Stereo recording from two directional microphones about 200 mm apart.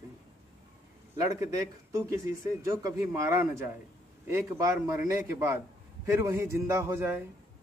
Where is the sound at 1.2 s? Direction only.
15° right (ahead or behind).